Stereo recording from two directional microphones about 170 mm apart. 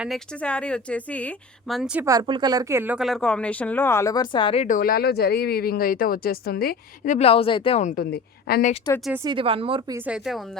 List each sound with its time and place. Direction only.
0.0 s speech: 5° left (ahead or behind)
2.0 s speech: 25° right (ahead or behind); by 4.6 s 30° left (ahead or behind)
4.6 s speech: 55° left (ahead or behind)
7.3 s speech: 35° left (ahead or behind)
7.9 s speech: 65° left (ahead or behind)
9.3 s a woman's voice: 30° right (ahead or behind)
10.1 s speech: centre (ahead or behind)